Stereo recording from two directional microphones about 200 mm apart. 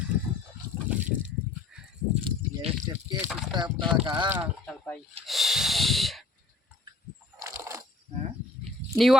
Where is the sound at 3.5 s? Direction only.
25° right (ahead or behind).